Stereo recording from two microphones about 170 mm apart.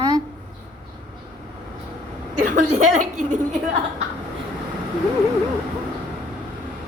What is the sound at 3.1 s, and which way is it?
Speech, 50° right (ahead or behind).